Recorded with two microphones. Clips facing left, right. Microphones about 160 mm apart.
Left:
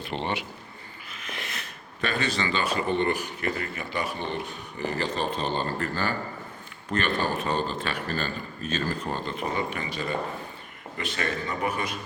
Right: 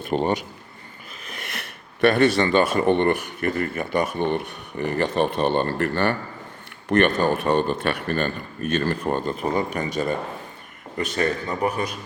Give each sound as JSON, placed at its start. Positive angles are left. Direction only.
{"t": 0.0, "sound": "a man's voice", "side_deg": -45}
{"t": 2.0, "sound": "a man's voice", "side_deg": -60}